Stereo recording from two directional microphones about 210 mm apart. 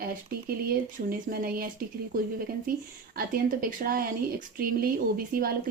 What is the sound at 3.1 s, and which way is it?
Speech, 45° right (ahead or behind).